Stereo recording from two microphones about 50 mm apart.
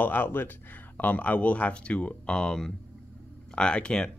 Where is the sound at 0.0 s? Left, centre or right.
Left.